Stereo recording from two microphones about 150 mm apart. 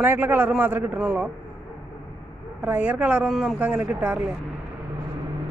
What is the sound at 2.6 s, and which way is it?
Speech, 10° right (ahead or behind).